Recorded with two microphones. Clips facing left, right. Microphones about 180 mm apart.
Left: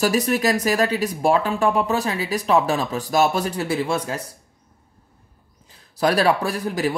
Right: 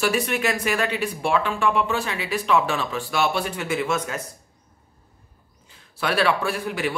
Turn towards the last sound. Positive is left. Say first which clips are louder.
# left 3 dB
turn(degrees=35)  # may be behind; listen again after turning